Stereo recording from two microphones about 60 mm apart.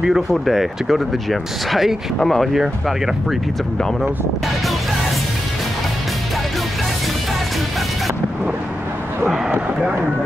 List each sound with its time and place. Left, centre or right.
0.0 s speech: centre